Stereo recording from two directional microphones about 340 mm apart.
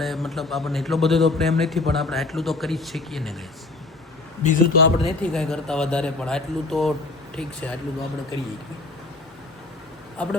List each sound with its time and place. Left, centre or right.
0.0 s a man's voice: centre
4.4 s speech: left
5.2 s a man's voice: centre
10.2 s a man's voice: centre